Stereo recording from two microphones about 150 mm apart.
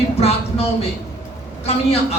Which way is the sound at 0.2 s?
40° left (ahead or behind).